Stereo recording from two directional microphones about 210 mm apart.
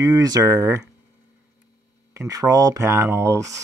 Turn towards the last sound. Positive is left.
turn(degrees=-15)  # may be behind; listen again after turning